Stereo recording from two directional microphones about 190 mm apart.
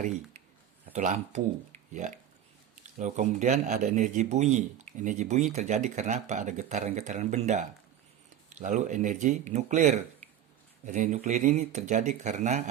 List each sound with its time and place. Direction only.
0.9 s speech: 40° right (ahead or behind)